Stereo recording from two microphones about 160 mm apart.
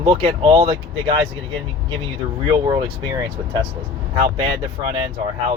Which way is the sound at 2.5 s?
30° right (ahead or behind).